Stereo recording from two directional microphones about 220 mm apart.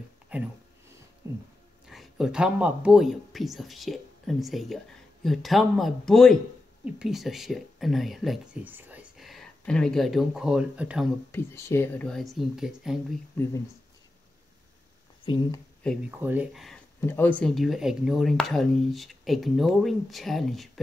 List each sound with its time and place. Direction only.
0.3 s speech: 5° right (ahead or behind)
1.2 s a sound: 15° right (ahead or behind)
1.9 s speech: centre (ahead or behind)
11.3 s speech: 10° left (ahead or behind)
15.2 s speech: 20° left (ahead or behind)
16.1 s speech: 10° right (ahead or behind)